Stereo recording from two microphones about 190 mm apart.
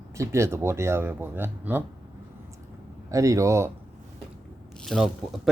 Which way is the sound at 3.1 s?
15° right (ahead or behind).